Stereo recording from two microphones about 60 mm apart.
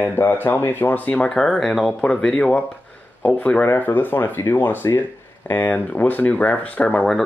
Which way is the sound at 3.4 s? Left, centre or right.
Left.